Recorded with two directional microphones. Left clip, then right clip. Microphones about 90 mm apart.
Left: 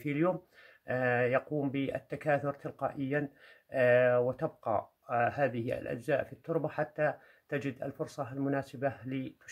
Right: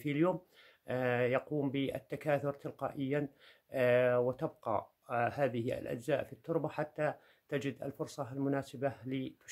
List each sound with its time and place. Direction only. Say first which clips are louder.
0.0 s speech: left 1 dB; 20° right (ahead or behind)